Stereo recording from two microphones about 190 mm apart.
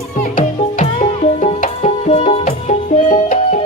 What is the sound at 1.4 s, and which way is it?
Music, 35° left (ahead or behind).